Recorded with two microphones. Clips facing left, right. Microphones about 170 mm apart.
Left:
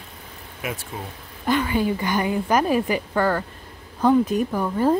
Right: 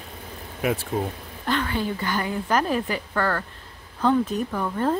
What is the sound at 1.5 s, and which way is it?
Speech, 10° left (ahead or behind).